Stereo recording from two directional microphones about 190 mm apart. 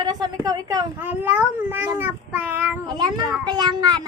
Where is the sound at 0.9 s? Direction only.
10° right (ahead or behind).